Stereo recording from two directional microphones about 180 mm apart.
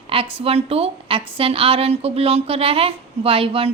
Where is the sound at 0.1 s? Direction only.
30° right (ahead or behind).